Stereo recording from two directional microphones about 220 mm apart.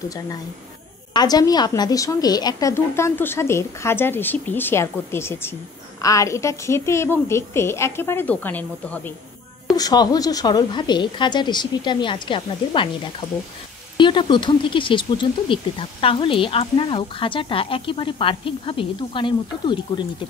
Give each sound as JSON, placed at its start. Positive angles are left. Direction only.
{"t": 1.1, "sound": "a woman's voice", "side_deg": 20}
{"t": 13.9, "sound": "speech", "side_deg": 20}